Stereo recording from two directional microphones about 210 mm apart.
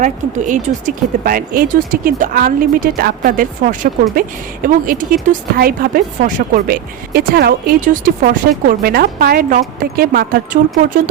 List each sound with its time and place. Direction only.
0.0 s a woman's voice: 35° right (ahead or behind)